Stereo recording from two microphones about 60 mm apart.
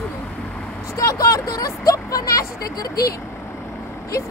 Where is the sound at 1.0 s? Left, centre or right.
Left.